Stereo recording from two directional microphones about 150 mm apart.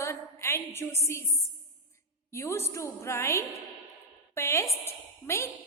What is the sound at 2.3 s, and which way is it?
A woman's voice, 20° left (ahead or behind).